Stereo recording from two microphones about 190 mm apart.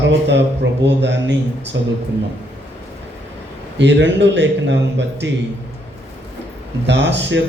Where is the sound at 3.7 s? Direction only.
70° right (ahead or behind).